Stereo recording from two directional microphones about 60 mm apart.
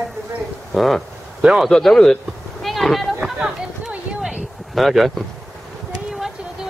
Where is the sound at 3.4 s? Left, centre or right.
Centre.